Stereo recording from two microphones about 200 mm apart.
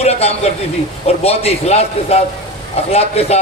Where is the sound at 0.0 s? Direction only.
30° left (ahead or behind).